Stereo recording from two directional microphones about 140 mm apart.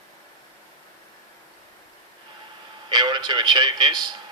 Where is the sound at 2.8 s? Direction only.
30° right (ahead or behind).